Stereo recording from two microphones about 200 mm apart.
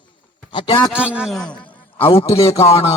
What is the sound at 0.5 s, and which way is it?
Speech, 25° left (ahead or behind).